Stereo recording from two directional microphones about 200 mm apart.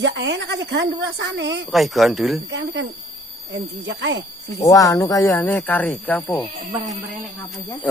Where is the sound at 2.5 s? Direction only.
65° right (ahead or behind).